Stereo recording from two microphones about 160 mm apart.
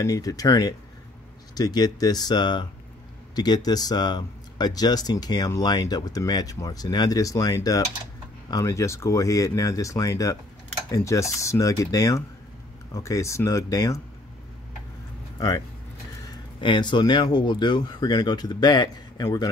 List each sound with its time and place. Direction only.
0.0 s speech: 20° left (ahead or behind)
15.3 s speech: 20° left (ahead or behind)
16.6 s speech: 30° left (ahead or behind)